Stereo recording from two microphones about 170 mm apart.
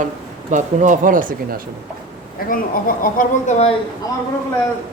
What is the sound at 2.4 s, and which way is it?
A woman's voice, 55° left (ahead or behind).